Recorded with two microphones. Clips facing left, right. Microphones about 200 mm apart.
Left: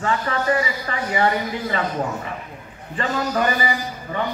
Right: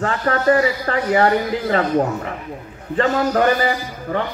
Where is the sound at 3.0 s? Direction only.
65° right (ahead or behind).